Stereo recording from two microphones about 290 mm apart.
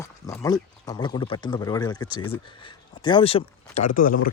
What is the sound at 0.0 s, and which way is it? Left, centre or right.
Speech, centre.